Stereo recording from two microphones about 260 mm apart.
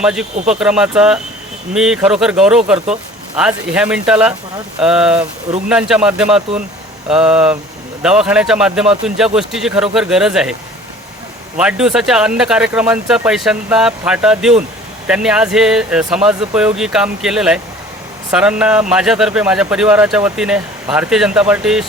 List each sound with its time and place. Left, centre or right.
0.0 s speech: centre
2.7 s speech: right
3.3 s speech: centre
11.5 s speech: centre